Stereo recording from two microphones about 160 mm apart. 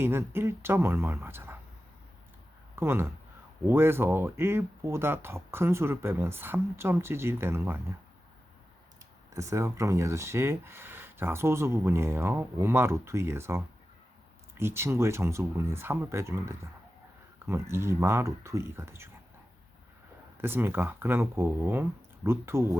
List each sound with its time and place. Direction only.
0.0 s speech: 15° right (ahead or behind)
2.7 s speech: 15° right (ahead or behind)
9.3 s speech: 20° right (ahead or behind)
20.4 s speech: 15° right (ahead or behind)